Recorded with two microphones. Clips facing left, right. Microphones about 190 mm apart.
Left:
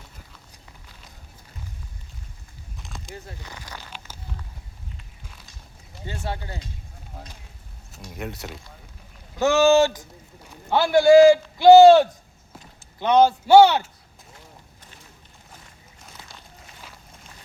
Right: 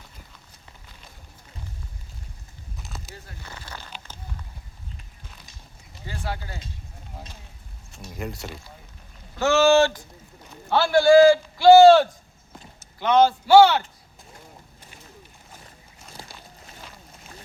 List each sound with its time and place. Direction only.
3.1 s speech: 15° left (ahead or behind)
6.1 s speech: 25° left (ahead or behind)
7.9 s speech: centre (ahead or behind)
9.3 s a man's voice: 15° left (ahead or behind)